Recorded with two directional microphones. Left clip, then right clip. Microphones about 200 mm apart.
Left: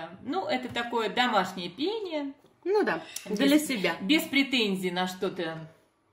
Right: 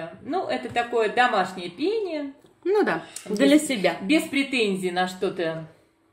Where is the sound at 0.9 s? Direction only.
40° left (ahead or behind).